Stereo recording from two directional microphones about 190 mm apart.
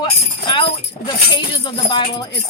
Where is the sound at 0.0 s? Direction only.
25° left (ahead or behind).